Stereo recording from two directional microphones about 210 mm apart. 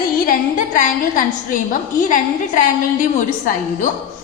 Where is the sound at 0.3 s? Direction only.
40° left (ahead or behind).